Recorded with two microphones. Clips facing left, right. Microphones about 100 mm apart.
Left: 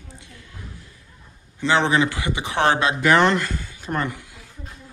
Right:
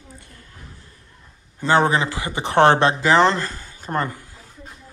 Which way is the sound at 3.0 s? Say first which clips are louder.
Right 1 dB; 30° right (ahead or behind).